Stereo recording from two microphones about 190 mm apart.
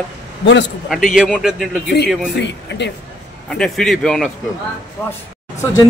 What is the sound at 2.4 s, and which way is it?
Speech, 65° left (ahead or behind).